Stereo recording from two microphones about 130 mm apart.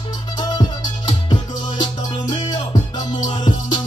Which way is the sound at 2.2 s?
35° left (ahead or behind).